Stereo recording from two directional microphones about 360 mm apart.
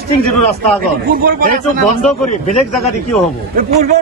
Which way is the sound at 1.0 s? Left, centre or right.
Right.